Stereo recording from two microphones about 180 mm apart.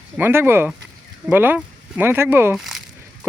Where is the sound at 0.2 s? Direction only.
15° right (ahead or behind).